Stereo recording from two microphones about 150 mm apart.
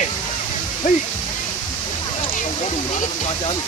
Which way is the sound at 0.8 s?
50° left (ahead or behind).